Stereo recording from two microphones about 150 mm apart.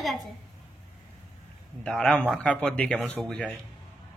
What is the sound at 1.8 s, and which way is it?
A man's voice, 5° left (ahead or behind).